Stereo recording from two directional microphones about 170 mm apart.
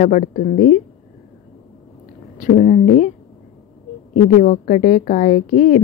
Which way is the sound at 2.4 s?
50° left (ahead or behind).